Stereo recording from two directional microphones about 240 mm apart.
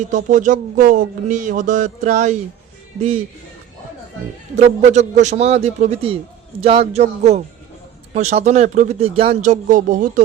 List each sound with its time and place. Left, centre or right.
0.1 s speech: right
4.5 s a man's voice: right